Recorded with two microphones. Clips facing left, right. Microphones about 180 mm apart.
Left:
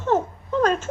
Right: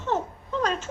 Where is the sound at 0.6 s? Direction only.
50° left (ahead or behind).